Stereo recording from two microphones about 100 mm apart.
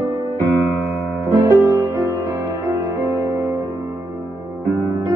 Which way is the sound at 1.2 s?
30° right (ahead or behind).